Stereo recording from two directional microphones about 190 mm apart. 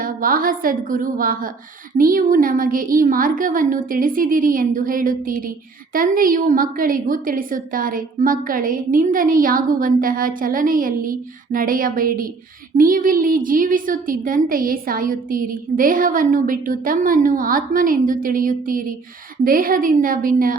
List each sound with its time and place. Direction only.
0.0 s a woman's voice: 45° right (ahead or behind)